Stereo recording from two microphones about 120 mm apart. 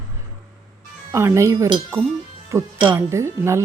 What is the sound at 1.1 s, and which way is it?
Speech, 25° right (ahead or behind).